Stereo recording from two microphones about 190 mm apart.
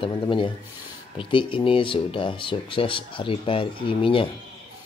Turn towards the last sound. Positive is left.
turn(degrees=25)  # may be behind; listen again after turning